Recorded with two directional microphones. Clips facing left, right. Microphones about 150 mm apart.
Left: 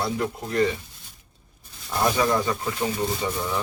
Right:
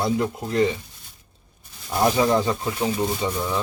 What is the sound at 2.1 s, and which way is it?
Speech, 20° right (ahead or behind).